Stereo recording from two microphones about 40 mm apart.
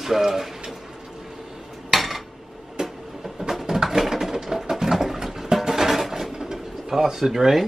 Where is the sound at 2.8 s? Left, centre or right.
Centre.